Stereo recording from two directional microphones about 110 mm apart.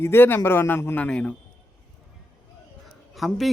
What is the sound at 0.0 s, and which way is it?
Speech, 20° left (ahead or behind).